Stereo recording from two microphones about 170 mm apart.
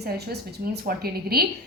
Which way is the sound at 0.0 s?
70° right (ahead or behind).